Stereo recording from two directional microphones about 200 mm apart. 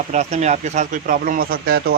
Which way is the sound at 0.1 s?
35° right (ahead or behind).